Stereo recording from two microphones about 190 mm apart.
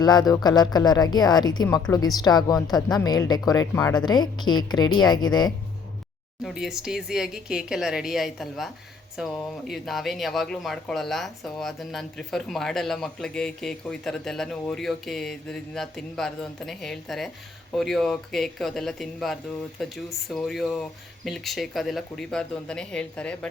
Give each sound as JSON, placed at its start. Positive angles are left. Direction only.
{"t": 0.0, "sound": "a woman's voice", "side_deg": 20}
{"t": 6.4, "sound": "speech", "side_deg": 0}